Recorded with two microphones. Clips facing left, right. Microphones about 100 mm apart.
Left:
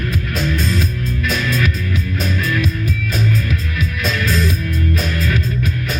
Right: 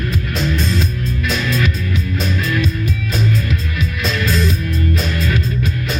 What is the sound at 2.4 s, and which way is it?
Music, 25° right (ahead or behind).